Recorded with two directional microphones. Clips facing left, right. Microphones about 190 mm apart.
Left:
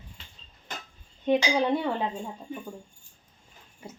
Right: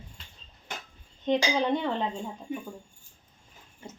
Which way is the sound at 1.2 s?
10° left (ahead or behind).